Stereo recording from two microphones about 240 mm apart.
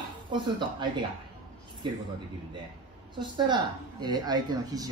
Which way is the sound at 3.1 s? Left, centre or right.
Centre.